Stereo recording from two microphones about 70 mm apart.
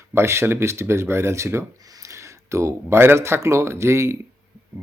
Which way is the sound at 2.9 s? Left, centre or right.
Right.